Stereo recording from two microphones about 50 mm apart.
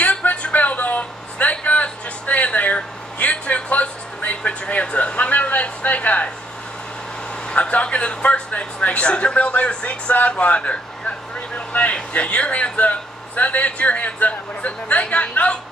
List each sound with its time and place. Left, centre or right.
0.0 s a sound: left
4.5 s a man's voice: left
7.4 s a man's voice: left